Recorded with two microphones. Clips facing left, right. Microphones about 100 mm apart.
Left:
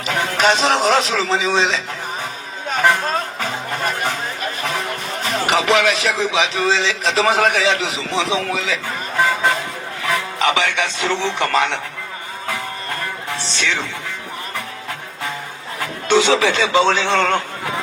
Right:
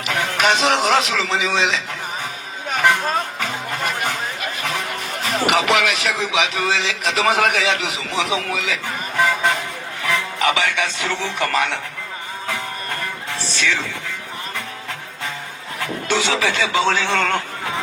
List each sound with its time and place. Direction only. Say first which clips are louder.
0.0 s speech: left 2 dB; 35° left (ahead or behind)
3.4 s music: left 2 dB; 35° left (ahead or behind)
4.4 s speech: left 2 dB; 35° left (ahead or behind)
12.5 s music: left 1 dB; 25° left (ahead or behind)
15.8 s speech: left 5 dB; 20° left (ahead or behind)